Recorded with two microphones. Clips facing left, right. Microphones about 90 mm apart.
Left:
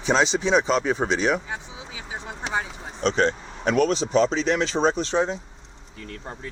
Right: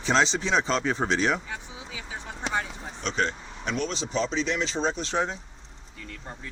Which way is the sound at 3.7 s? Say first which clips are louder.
Left 9 dB; 50° left (ahead or behind).